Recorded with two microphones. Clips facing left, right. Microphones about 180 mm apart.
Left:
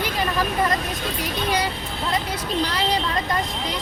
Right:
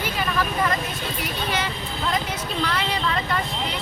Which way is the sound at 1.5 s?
40° left (ahead or behind).